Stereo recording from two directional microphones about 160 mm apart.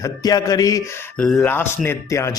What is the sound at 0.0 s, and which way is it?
Speech, 25° left (ahead or behind).